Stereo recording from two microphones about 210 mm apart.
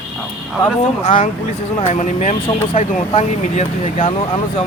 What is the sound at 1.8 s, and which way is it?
Speech, 30° left (ahead or behind).